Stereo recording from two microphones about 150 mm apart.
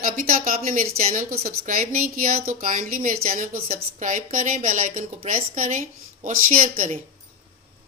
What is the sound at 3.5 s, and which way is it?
Speech, 50° right (ahead or behind).